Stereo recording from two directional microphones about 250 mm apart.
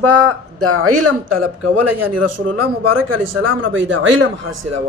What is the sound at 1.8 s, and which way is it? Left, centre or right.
Speech, right.